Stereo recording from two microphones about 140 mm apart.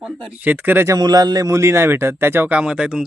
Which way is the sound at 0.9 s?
30° right (ahead or behind).